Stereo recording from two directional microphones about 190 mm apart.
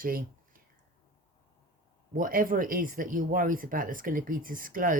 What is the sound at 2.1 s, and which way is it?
Speech, 45° right (ahead or behind).